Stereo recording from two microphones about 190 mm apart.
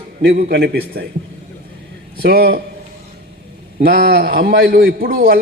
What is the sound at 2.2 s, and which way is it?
Speech, 55° right (ahead or behind).